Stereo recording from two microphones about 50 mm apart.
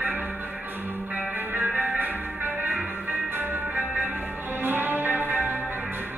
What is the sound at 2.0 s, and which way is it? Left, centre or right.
Music, right.